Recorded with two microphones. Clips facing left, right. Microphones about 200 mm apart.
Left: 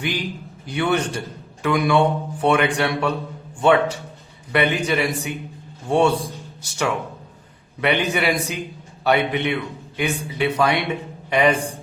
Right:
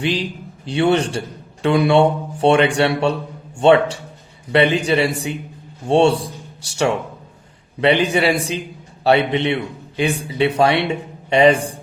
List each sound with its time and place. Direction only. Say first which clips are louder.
0.2 s a man's voice: right 3 dB; 30° right (ahead or behind)
7.8 s a man's voice: right 5 dB; 30° right (ahead or behind)